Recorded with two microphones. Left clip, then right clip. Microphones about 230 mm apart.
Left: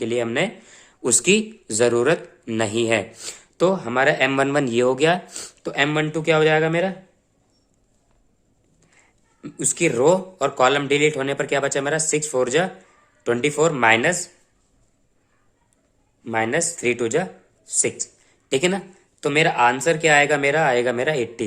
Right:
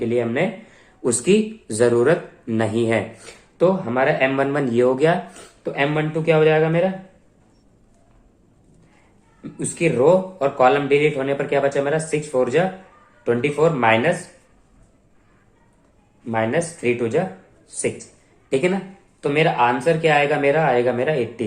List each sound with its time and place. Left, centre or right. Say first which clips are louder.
0.0 s speech: right 1 dB; left
9.4 s speech: even; left
16.2 s speech: right 1 dB; left